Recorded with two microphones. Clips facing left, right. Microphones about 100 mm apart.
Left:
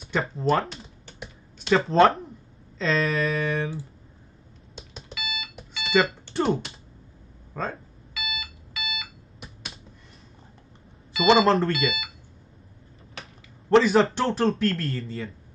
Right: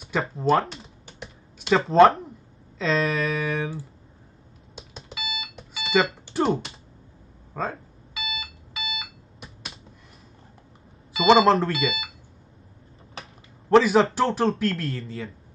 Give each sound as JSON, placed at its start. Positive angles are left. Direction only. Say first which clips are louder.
{"t": 0.0, "sound": "typing", "louder": "right 1 dB", "side_deg": 0}
{"t": 2.8, "sound": "speech", "louder": "even", "side_deg": 0}
{"t": 5.1, "sound": "alarm clock", "louder": "right 1 dB", "side_deg": -30}
{"t": 5.6, "sound": "alarm clock", "louder": "even", "side_deg": 0}
{"t": 6.2, "sound": "speech", "louder": "right 1 dB", "side_deg": 0}
{"t": 8.1, "sound": "alarm clock", "louder": "right 1 dB", "side_deg": -30}
{"t": 9.4, "sound": "finger snapping", "louder": "even", "side_deg": 0}
{"t": 11.1, "sound": "speech", "louder": "right 2 dB", "side_deg": -35}
{"t": 11.4, "sound": "speech", "louder": "right 2 dB", "side_deg": 0}
{"t": 13.2, "sound": "a sound", "louder": "even", "side_deg": -5}
{"t": 14.1, "sound": "speech", "louder": "right 1 dB", "side_deg": 0}